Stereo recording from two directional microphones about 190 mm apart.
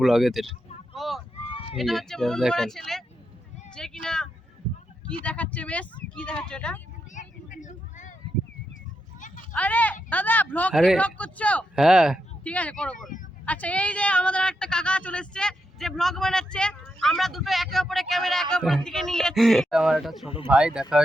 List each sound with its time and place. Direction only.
0.0 s speech: centre (ahead or behind)
0.9 s a sound: centre (ahead or behind)
1.7 s speech: centre (ahead or behind)
3.8 s a sound: 5° left (ahead or behind)
5.0 s speech: 5° left (ahead or behind)
7.1 s vehicle: 40° left (ahead or behind)
9.5 s speech: 10° left (ahead or behind)
20.2 s speech: 30° left (ahead or behind)
20.5 s speech: 5° right (ahead or behind)